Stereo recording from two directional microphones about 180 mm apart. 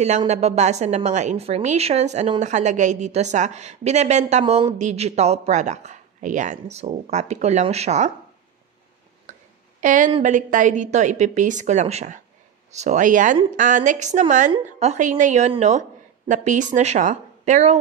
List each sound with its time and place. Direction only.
0.3 s a woman's voice: 35° right (ahead or behind)
9.8 s a woman's voice: 45° right (ahead or behind)